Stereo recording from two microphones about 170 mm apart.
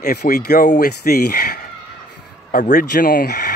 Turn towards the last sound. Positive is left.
turn(degrees=65)  # may be behind; listen again after turning